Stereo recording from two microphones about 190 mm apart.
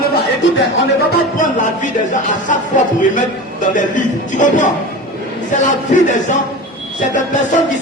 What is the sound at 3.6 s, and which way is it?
Speech, 45° left (ahead or behind).